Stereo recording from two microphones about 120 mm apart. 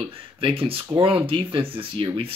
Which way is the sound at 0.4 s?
50° right (ahead or behind).